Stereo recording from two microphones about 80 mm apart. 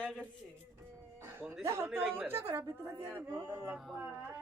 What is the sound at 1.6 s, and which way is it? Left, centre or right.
A woman's voice, right.